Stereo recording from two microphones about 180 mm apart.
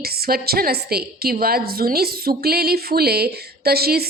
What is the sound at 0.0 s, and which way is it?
A woman's voice, 60° right (ahead or behind).